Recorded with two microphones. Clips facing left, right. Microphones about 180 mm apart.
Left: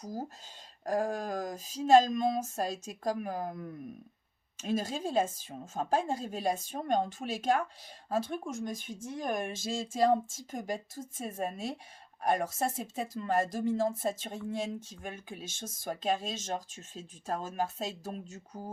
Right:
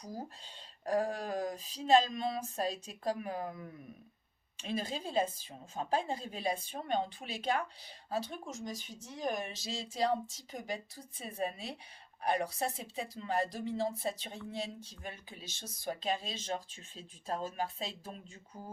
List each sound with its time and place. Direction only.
0.0 s speech: 45° left (ahead or behind)